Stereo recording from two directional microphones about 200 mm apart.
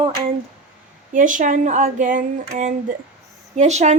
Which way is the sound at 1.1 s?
40° right (ahead or behind).